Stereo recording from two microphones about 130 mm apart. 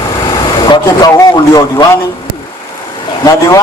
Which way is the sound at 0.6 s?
30° left (ahead or behind).